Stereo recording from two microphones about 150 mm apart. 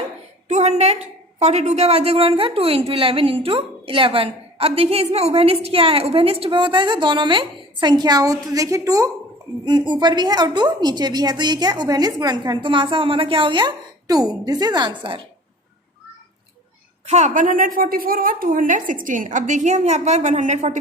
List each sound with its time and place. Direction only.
0.4 s a sound: 50° right (ahead or behind)
1.4 s a woman's voice: 45° right (ahead or behind); by 15.2 s 30° right (ahead or behind)
17.1 s a woman's voice: 50° right (ahead or behind)